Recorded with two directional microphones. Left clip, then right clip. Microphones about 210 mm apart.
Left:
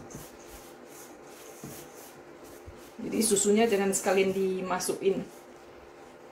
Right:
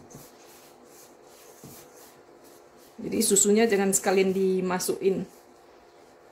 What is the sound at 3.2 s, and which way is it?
Speech, 55° right (ahead or behind).